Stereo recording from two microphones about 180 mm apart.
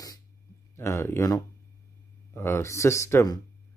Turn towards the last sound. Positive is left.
turn(degrees=20)  # may be behind; listen again after turning